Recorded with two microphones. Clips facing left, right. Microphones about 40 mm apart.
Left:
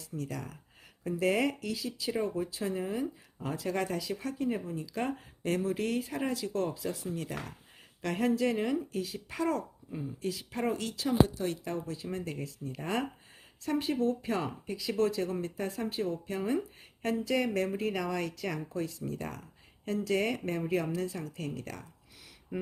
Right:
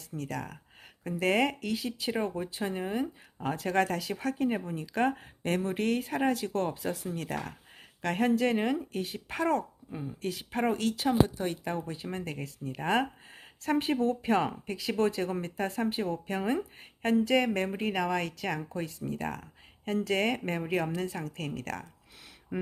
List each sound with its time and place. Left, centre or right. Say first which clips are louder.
0.1 s speech: even; centre
1.2 s speech: right 2 dB; right